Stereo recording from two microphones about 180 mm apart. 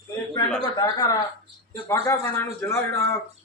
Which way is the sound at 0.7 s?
20° left (ahead or behind).